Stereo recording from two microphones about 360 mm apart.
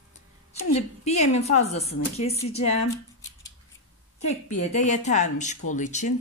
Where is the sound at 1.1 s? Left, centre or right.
Centre.